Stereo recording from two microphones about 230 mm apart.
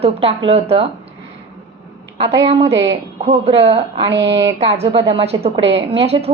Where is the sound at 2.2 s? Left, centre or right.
Right.